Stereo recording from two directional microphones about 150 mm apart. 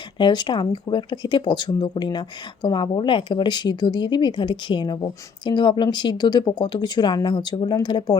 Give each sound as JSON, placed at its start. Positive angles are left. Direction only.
{"t": 0.2, "sound": "speech", "side_deg": 30}